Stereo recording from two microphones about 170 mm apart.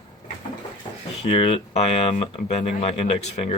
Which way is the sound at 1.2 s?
35° left (ahead or behind).